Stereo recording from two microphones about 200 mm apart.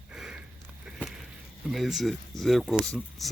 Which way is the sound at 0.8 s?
5° right (ahead or behind).